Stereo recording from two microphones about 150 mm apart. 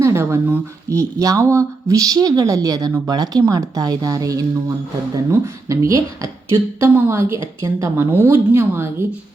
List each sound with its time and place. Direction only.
0.0 s speech: 20° right (ahead or behind)